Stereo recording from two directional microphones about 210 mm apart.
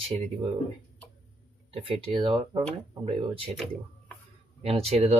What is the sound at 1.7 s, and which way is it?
Speech, 25° right (ahead or behind).